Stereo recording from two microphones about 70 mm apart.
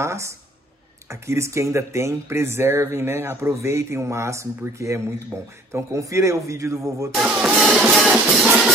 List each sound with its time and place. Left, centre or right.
0.0 s a man's voice: right
7.2 s speech: centre
7.6 s music: centre